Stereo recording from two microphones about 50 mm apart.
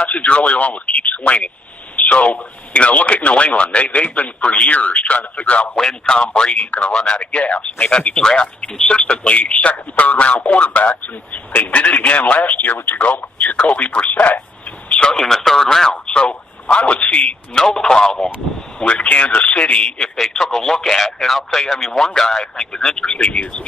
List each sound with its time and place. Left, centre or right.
0.0 s speech: left
5.8 s speech: centre; by 13.0 s left
13.0 s speech: left
14.9 s telephone: centre
15.1 s speech: centre
16.1 s a man's voice: left
17.6 s speech: centre
20.2 s speech: centre; by 23.6 s left